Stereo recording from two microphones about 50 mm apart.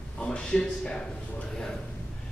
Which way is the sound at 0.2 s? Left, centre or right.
Centre.